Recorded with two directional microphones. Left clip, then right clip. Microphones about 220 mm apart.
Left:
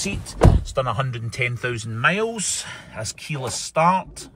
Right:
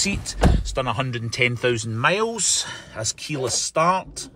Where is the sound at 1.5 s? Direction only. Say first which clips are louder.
Right 5 dB; 15° right (ahead or behind).